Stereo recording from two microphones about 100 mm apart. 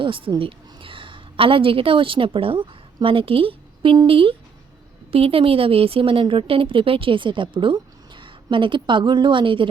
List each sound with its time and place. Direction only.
0.0 s a woman's voice: 55° right (ahead or behind)